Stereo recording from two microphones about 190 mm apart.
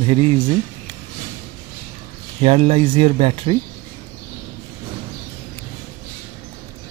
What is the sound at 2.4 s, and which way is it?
Speech, 30° right (ahead or behind).